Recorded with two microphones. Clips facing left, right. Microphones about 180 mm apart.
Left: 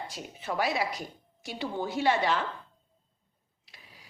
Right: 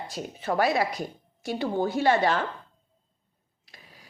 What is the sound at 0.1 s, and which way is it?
A woman's voice, 45° right (ahead or behind).